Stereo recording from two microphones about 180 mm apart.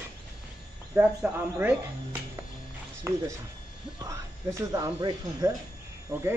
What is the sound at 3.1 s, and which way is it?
Speech, 15° right (ahead or behind).